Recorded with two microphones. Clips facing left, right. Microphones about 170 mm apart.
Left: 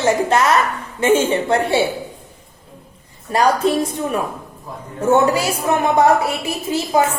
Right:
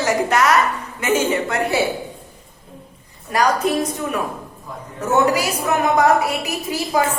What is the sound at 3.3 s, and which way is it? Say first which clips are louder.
A woman's voice: left 2 dB; 30° left (ahead or behind).